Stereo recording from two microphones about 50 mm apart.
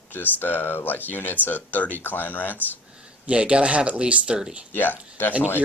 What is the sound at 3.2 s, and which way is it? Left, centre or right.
Speech, right.